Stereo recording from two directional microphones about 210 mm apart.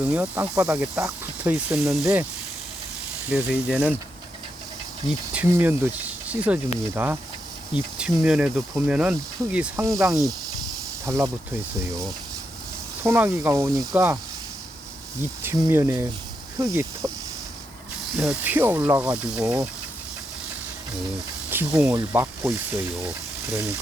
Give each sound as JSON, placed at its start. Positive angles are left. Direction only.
{"t": 0.1, "sound": "speech", "side_deg": -10}
{"t": 3.2, "sound": "speech", "side_deg": -5}
{"t": 5.3, "sound": "speech", "side_deg": -10}
{"t": 13.1, "sound": "speech", "side_deg": -10}
{"t": 15.4, "sound": "speech", "side_deg": -15}
{"t": 18.2, "sound": "speech", "side_deg": -5}
{"t": 21.5, "sound": "speech", "side_deg": -10}